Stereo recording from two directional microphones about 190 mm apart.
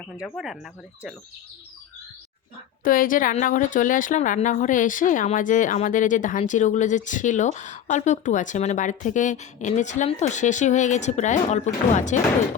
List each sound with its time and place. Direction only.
0.2 s speech: centre (ahead or behind)
2.8 s speech: 45° left (ahead or behind)